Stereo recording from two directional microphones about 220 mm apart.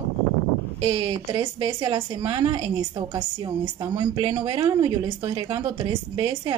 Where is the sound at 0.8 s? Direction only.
20° right (ahead or behind).